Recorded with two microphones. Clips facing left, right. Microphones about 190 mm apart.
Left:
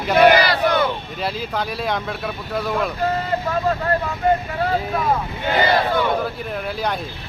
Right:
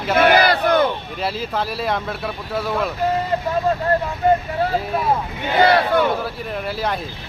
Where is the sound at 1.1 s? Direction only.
Centre (ahead or behind).